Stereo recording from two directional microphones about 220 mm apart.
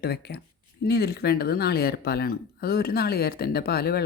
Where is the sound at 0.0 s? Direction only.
45° left (ahead or behind).